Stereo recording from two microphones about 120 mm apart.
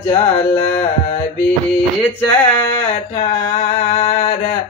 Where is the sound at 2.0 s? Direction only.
15° left (ahead or behind).